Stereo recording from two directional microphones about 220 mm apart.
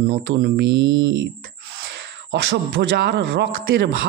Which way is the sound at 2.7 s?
50° right (ahead or behind).